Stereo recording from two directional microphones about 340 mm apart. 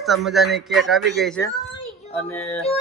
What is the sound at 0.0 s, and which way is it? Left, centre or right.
A man's voice, centre.